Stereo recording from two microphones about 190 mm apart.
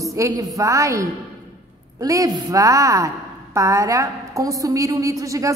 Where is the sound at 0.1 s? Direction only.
15° right (ahead or behind).